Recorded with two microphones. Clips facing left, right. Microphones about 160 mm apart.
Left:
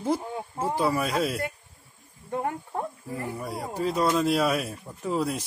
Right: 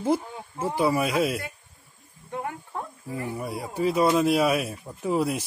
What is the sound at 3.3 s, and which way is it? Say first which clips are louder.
Speech: right 3 dB; 5° right (ahead or behind).